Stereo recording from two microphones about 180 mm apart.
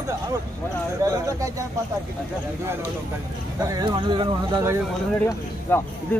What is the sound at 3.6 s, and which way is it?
Speech, 20° right (ahead or behind).